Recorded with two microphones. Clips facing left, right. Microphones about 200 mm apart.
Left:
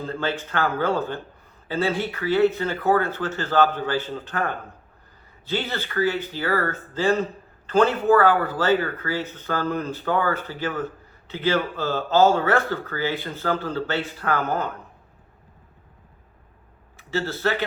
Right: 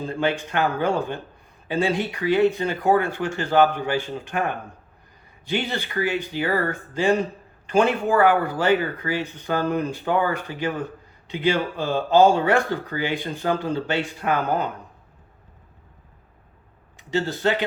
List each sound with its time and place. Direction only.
0.0 s speech: 15° right (ahead or behind)
17.0 s speech: 15° right (ahead or behind)